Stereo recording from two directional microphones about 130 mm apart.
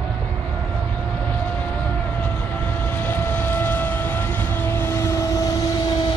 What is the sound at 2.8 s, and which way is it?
Vehicle, 15° left (ahead or behind).